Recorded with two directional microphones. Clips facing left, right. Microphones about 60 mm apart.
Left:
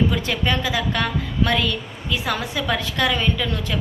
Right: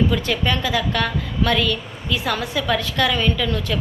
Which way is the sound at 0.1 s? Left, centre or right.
Left.